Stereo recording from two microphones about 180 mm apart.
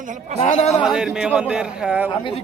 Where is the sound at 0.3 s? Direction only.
40° left (ahead or behind).